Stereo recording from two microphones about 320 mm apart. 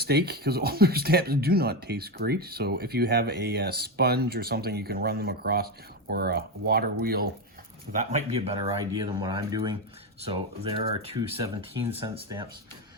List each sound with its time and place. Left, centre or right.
0.0 s speech: right; by 12.5 s centre